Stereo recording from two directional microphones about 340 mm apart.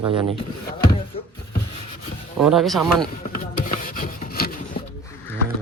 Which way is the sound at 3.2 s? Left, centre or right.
Left.